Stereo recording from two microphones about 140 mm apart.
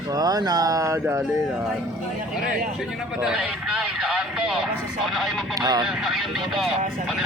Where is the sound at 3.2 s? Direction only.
5° right (ahead or behind).